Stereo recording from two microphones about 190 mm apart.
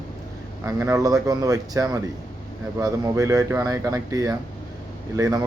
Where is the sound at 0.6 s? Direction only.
15° right (ahead or behind).